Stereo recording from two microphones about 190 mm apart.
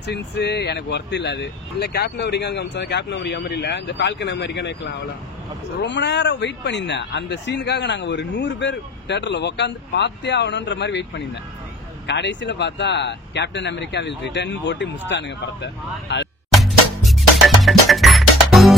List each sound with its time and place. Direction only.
0.0 s speech: 60° left (ahead or behind)
17.0 s music: centre (ahead or behind)